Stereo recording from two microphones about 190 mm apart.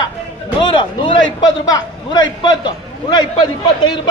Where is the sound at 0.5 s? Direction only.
25° left (ahead or behind).